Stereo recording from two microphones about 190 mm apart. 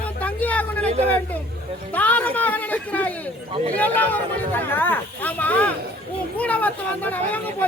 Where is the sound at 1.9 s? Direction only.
10° left (ahead or behind).